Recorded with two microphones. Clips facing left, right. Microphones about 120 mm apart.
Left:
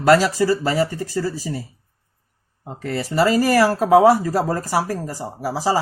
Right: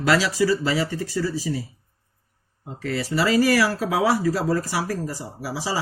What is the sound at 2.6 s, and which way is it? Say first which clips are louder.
Speech: left 2 dB; 50° left (ahead or behind).